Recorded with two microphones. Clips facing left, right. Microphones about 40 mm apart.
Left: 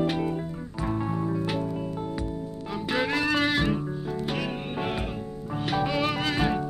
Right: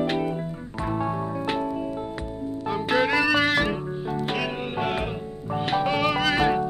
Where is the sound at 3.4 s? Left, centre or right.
Right.